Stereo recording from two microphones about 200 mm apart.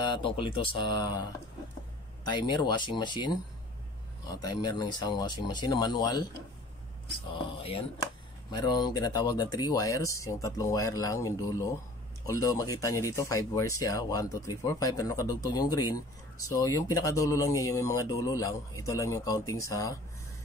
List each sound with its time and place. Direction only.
0.0 s speech: 25° left (ahead or behind)
2.2 s speech: 20° left (ahead or behind)
8.5 s speech: 20° left (ahead or behind)